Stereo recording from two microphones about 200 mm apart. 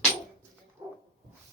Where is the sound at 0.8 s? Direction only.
20° right (ahead or behind).